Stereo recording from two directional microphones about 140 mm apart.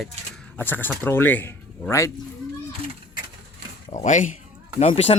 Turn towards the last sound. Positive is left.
turn(degrees=45)  # may be behind; listen again after turning